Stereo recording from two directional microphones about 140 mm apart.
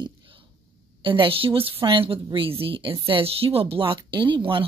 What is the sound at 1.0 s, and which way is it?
Speech, 40° right (ahead or behind).